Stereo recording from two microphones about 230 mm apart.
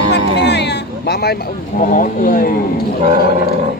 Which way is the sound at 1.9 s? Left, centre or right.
Left.